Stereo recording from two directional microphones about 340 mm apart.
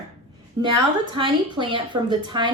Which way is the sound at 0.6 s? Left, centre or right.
Centre.